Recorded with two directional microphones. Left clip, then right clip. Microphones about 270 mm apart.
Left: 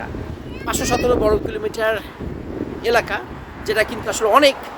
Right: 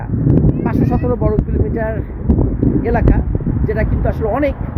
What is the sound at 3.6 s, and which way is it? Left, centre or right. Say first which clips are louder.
Speech: left 2 dB; centre.